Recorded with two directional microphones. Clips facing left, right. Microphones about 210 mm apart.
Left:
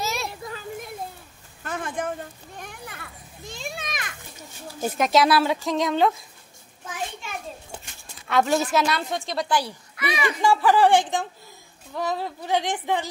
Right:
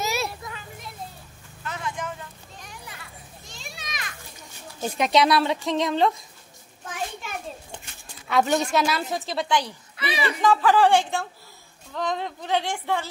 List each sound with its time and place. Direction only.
0.0 s a sound: 5° right (ahead or behind)
0.4 s a sound: 35° left (ahead or behind)
1.6 s children playing: 50° left (ahead or behind)
4.8 s a woman's voice: centre (ahead or behind)
8.3 s a woman's voice: centre (ahead or behind)
9.9 s speech: 30° right (ahead or behind)
10.2 s speech: 15° left (ahead or behind)